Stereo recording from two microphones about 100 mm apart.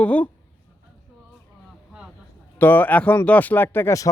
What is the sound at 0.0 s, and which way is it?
Speech, 15° left (ahead or behind).